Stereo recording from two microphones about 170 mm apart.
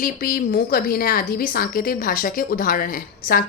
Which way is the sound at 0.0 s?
55° left (ahead or behind).